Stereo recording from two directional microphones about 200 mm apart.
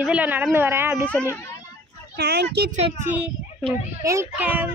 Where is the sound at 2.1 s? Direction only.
50° right (ahead or behind).